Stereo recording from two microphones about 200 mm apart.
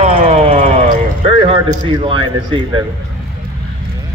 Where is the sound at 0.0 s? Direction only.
35° right (ahead or behind).